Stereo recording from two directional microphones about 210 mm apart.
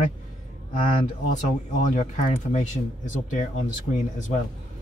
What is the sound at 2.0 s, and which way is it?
Speech, 35° left (ahead or behind).